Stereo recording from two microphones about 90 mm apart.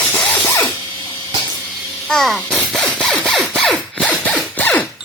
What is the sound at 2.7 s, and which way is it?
Rub, 5° left (ahead or behind).